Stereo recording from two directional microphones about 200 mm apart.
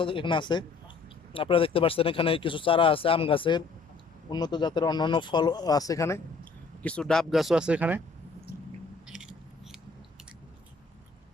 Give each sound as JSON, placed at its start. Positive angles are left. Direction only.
{"t": 0.0, "sound": "speech", "side_deg": 25}
{"t": 9.0, "sound": "biting", "side_deg": -5}